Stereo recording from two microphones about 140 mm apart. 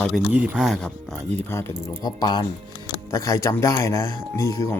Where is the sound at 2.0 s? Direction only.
30° left (ahead or behind).